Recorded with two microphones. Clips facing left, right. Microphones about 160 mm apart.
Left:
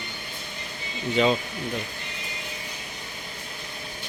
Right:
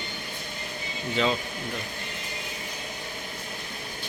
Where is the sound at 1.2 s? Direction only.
10° left (ahead or behind).